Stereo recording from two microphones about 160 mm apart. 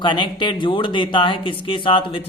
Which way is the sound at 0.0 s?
30° left (ahead or behind).